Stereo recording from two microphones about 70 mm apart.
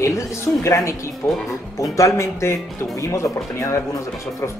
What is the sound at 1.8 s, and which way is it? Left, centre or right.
Speech, left.